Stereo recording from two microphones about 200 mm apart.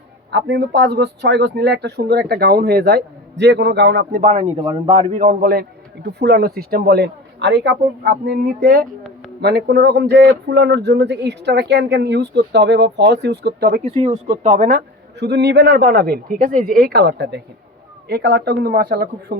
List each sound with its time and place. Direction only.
0.3 s speech: 60° right (ahead or behind)
4.1 s speech: 35° right (ahead or behind)
4.6 s a man's voice: 25° right (ahead or behind); by 13.5 s 60° right (ahead or behind)
13.6 s a man's voice: 50° right (ahead or behind)
13.8 s speech: 30° right (ahead or behind)
15.2 s a man's voice: 60° right (ahead or behind)